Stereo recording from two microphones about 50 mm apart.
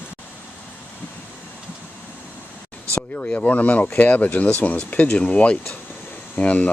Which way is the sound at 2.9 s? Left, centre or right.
Left.